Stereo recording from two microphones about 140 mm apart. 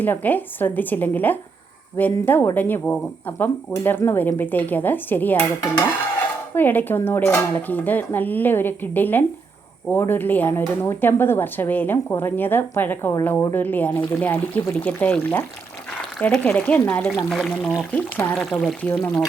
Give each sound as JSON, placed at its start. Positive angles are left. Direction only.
{"t": 0.0, "sound": "speech", "side_deg": 10}
{"t": 6.5, "sound": "speech", "side_deg": 15}